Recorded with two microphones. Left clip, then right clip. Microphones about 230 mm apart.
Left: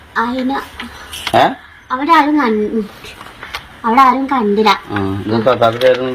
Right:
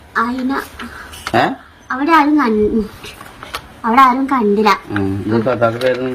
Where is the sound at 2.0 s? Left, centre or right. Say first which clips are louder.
Left 1 dB; right.